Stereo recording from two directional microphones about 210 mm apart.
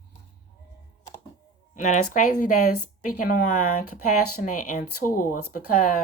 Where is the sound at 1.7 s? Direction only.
35° left (ahead or behind).